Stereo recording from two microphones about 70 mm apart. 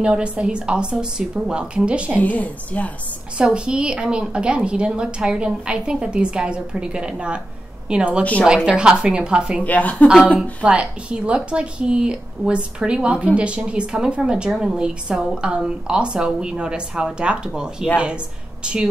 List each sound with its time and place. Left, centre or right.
0.0 s a woman's voice: centre
2.2 s a woman's voice: left
3.3 s a woman's voice: centre
8.2 s a woman's voice: centre
8.6 s a woman's voice: centre
9.7 s a woman's voice: left
10.6 s a woman's voice: centre